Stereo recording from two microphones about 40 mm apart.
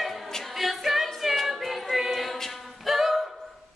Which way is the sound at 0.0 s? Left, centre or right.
Centre.